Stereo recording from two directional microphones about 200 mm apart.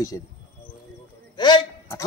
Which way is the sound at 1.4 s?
20° left (ahead or behind).